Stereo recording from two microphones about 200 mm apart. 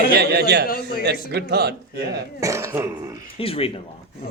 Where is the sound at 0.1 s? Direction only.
55° right (ahead or behind).